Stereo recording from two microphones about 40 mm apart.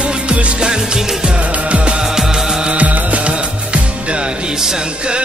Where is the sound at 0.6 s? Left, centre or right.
Centre.